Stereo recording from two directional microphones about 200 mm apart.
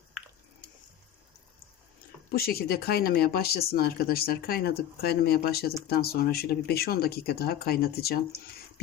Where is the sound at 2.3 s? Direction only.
50° left (ahead or behind).